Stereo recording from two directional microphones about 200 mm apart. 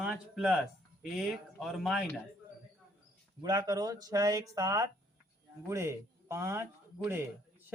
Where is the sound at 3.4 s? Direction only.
20° right (ahead or behind).